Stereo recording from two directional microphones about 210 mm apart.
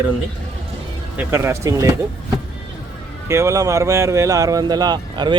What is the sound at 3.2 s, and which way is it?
Speech, 15° right (ahead or behind).